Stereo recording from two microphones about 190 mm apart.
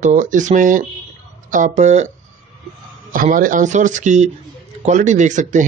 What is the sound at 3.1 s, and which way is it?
Speech, 45° right (ahead or behind).